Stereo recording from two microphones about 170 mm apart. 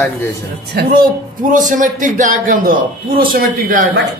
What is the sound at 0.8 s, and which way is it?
Speech, 65° right (ahead or behind).